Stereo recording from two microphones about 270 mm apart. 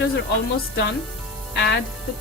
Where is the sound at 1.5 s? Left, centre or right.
Left.